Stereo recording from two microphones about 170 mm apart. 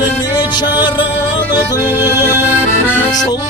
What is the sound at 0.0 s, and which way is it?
Music, 25° left (ahead or behind).